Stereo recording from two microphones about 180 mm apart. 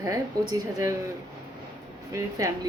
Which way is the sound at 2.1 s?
15° right (ahead or behind).